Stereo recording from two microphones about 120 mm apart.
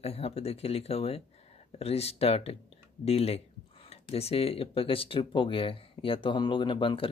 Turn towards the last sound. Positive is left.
turn(degrees=45)  # may be behind; listen again after turning